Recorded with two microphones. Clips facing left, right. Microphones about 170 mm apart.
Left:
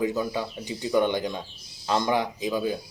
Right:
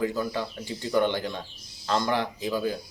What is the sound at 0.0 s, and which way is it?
Speech, 15° left (ahead or behind).